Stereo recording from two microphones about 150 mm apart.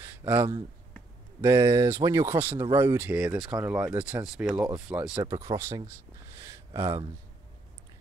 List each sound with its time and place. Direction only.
0.0 s speech: 15° right (ahead or behind)
5.1 s speech: 25° right (ahead or behind)